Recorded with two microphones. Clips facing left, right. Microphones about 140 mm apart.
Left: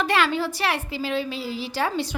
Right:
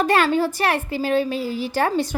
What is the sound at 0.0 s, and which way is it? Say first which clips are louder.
A woman's voice: right 4 dB; 45° right (ahead or behind).